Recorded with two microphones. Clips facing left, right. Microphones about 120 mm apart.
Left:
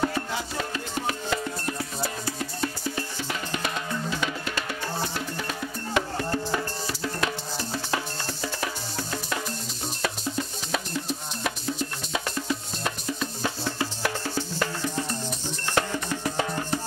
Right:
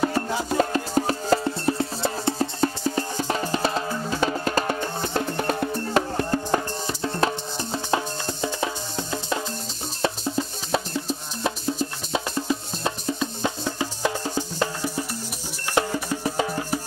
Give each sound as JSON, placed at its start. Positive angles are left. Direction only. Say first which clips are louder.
{"t": 0.5, "sound": "music", "louder": "right 9 dB", "side_deg": -45}
{"t": 6.9, "sound": "music", "louder": "right 7 dB", "side_deg": -30}